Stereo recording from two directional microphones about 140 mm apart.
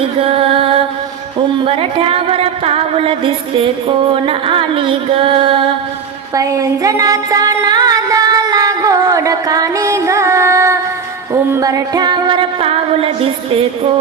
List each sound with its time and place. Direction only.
0.2 s music: 40° right (ahead or behind)
6.3 s music: 25° right (ahead or behind); by 13.9 s 40° right (ahead or behind)